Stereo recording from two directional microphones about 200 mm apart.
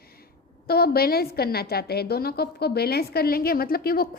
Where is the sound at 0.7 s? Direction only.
50° left (ahead or behind).